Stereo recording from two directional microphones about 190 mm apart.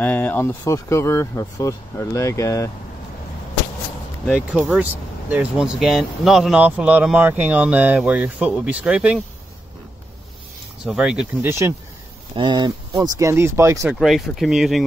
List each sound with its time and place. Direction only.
0.0 s speech: 10° left (ahead or behind)
4.5 s speech: 5° right (ahead or behind)
10.8 s speech: 5° right (ahead or behind)
12.4 s speech: 25° right (ahead or behind)
13.9 s speech: centre (ahead or behind)